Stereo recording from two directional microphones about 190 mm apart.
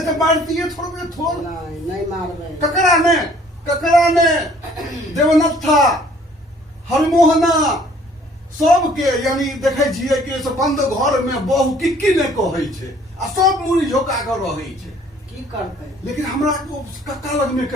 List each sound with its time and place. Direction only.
0.0 s a man's voice: centre (ahead or behind)
2.7 s a man's voice: centre (ahead or behind)
16.1 s a man's voice: centre (ahead or behind)